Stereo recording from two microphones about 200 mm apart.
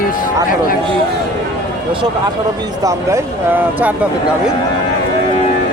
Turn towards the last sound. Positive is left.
turn(degrees=-10)  # may be behind; listen again after turning